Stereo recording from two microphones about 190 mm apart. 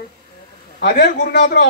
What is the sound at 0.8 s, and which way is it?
Speech, 60° left (ahead or behind).